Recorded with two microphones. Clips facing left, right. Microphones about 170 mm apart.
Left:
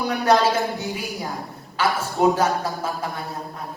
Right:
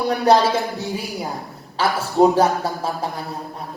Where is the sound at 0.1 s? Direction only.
35° right (ahead or behind).